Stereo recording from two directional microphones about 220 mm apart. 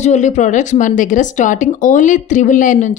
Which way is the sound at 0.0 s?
30° left (ahead or behind).